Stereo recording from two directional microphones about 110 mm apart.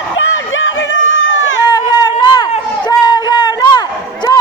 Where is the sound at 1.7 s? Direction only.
40° left (ahead or behind).